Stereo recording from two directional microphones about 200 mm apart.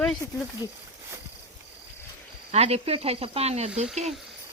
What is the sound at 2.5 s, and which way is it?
Speech, 30° right (ahead or behind).